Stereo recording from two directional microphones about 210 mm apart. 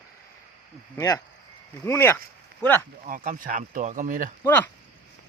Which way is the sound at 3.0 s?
40° right (ahead or behind).